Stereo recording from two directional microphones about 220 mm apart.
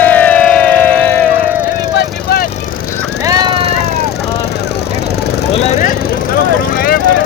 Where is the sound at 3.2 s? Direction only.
20° right (ahead or behind).